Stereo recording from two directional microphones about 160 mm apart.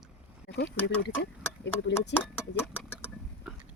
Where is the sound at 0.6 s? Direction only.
90° left.